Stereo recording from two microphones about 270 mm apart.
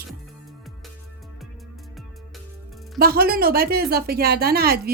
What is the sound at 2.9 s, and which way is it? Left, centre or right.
A woman's voice, right.